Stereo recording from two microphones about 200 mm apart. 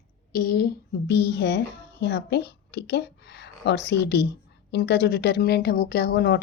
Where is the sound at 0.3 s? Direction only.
50° left (ahead or behind).